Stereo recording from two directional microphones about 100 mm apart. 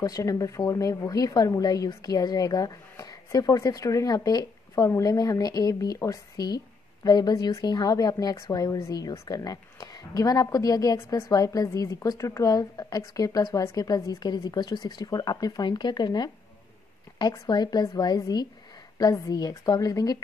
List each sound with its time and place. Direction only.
0.0 s a woman's voice: 35° left (ahead or behind)